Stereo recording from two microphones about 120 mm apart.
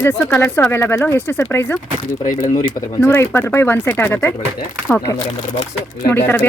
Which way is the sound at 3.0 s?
15° left (ahead or behind).